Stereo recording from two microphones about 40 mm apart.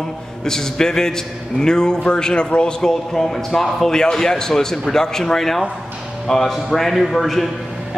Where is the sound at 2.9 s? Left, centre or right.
Centre.